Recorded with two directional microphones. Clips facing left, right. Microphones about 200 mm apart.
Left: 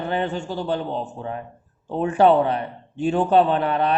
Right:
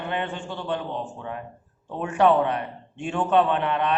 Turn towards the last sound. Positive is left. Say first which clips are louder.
# left 3 dB
turn(degrees=35)  # may be behind; listen again after turning